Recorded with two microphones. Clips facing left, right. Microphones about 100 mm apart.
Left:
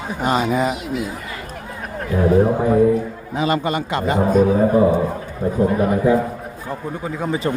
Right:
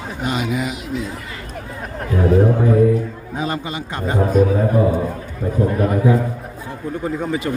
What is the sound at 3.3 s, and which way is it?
Speech, 90° left.